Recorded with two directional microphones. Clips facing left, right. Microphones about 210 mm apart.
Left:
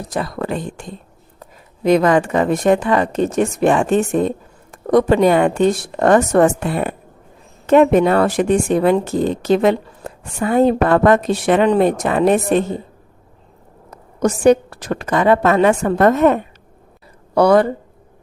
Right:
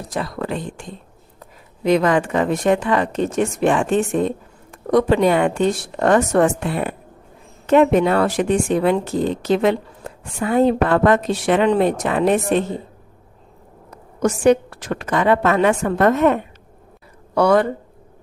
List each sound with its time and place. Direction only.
0.1 s speech: 45° left (ahead or behind)
14.2 s speech: 40° left (ahead or behind)